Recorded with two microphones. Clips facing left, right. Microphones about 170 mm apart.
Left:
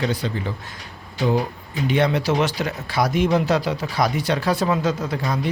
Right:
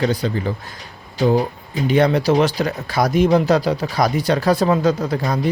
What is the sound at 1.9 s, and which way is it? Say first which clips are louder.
Speech: right 4 dB; 40° right (ahead or behind).